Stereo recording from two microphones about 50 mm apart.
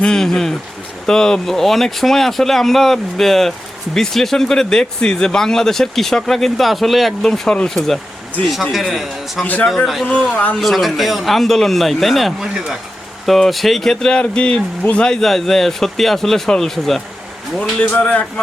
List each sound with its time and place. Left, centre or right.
0.0 s speech: centre
9.4 s speech: left
9.6 s speech: centre
10.3 s speech: left
10.6 s speech: centre
17.9 s speech: left